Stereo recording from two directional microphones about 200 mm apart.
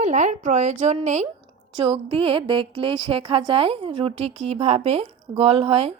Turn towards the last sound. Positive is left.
turn(degrees=-30)  # may be behind; listen again after turning